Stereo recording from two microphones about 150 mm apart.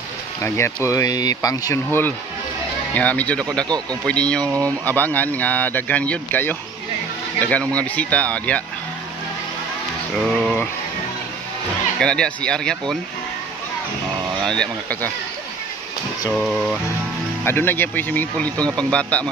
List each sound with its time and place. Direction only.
0.8 s speech: 25° left (ahead or behind)
3.6 s speech: 25° right (ahead or behind)
4.0 s speech: 5° left (ahead or behind)
4.4 s speech: 20° right (ahead or behind)
4.8 s speech: 10° left (ahead or behind)
10.1 s speech: centre (ahead or behind)
12.0 s speech: 5° left (ahead or behind)
14.4 s speech: 5° left (ahead or behind)
16.3 s speech: centre (ahead or behind)
17.5 s speech: 15° left (ahead or behind)